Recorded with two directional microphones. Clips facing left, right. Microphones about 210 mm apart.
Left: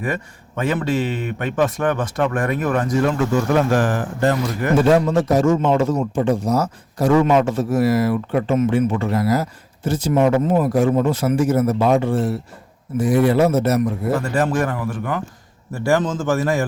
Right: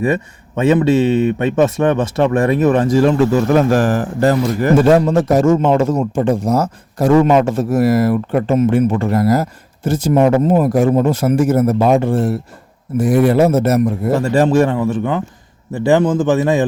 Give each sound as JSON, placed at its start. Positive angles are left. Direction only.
{"t": 0.0, "sound": "speech", "side_deg": -25}
{"t": 14.1, "sound": "speech", "side_deg": -30}